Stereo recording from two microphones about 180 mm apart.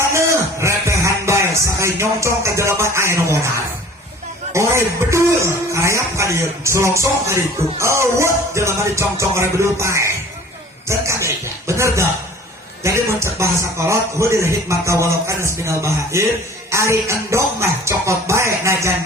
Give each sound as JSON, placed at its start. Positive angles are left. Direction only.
{"t": 0.1, "sound": "music", "side_deg": -15}
{"t": 4.5, "sound": "speech", "side_deg": -15}